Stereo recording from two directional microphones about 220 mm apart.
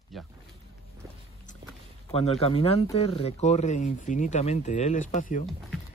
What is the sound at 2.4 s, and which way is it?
Speech, 25° left (ahead or behind).